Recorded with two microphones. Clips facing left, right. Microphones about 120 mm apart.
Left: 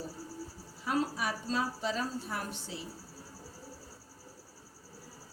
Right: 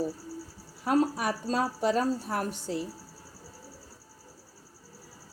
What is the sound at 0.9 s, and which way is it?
A woman's voice, 50° right (ahead or behind).